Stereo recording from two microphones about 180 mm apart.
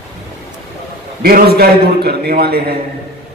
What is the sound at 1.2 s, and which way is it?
A man's voice, 60° right (ahead or behind).